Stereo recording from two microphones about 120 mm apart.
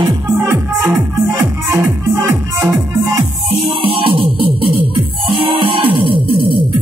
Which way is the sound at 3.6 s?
50° right (ahead or behind).